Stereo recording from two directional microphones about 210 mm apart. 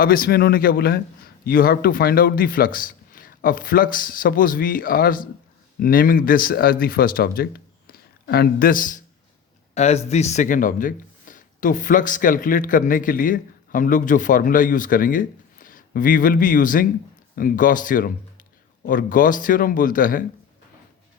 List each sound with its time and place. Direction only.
0.0 s speech: 45° left (ahead or behind)